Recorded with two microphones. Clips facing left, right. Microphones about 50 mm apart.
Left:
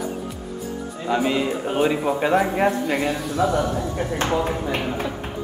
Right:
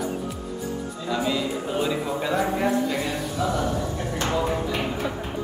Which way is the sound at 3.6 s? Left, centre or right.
Left.